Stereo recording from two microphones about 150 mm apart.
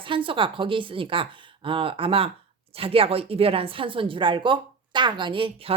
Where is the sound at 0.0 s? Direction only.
35° right (ahead or behind).